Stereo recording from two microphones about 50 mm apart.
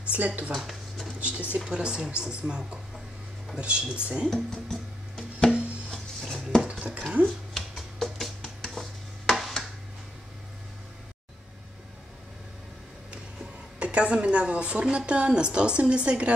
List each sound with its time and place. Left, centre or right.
0.5 s a sound: centre
1.2 s a woman's voice: right
4.3 s music: centre
5.5 s music: right
5.9 s music: centre
6.6 s dishes: centre
7.2 s music: centre
9.3 s a sound: centre
13.7 s a woman's voice: right